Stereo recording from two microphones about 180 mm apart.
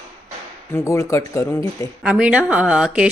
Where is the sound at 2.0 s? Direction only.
5° right (ahead or behind).